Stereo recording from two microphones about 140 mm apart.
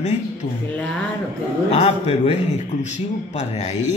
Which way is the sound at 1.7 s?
50° left (ahead or behind).